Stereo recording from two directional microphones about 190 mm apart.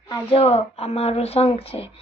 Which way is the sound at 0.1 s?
30° left (ahead or behind).